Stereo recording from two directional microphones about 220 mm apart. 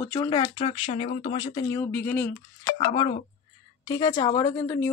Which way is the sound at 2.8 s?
25° left (ahead or behind).